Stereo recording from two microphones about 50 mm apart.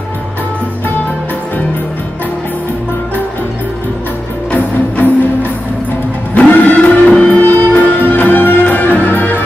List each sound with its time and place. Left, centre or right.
4.5 s music: left
7.3 s music: left